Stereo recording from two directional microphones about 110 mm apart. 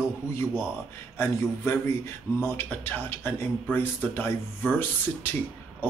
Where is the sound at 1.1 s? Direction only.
20° left (ahead or behind).